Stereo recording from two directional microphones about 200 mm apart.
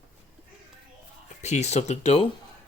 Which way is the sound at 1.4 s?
35° left (ahead or behind).